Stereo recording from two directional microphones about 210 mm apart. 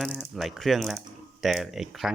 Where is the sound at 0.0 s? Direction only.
Centre (ahead or behind).